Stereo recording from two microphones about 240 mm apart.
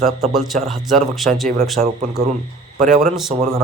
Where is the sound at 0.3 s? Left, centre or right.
Centre.